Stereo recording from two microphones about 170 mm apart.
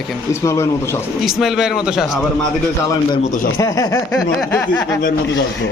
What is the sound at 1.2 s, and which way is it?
Speech, centre (ahead or behind).